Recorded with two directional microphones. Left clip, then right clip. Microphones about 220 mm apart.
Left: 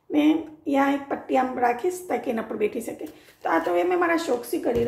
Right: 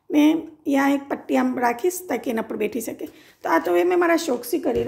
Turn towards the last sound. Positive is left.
turn(degrees=-50)  # may be behind; listen again after turning